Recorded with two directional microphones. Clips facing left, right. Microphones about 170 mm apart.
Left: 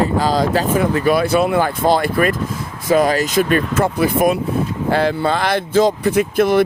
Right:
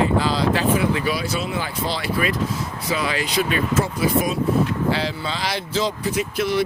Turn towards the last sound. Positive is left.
turn(degrees=55)  # may be behind; listen again after turning